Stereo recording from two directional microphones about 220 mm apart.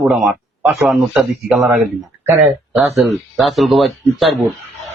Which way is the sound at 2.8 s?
Centre (ahead or behind).